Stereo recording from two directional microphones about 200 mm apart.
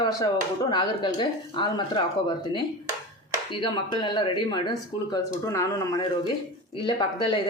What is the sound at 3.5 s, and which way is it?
Speech, 25° left (ahead or behind).